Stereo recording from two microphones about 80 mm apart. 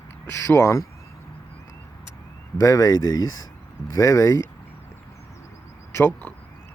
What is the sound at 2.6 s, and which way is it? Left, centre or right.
Speech, left.